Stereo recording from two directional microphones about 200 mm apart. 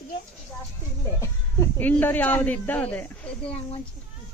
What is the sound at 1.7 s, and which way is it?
Speech, 10° left (ahead or behind).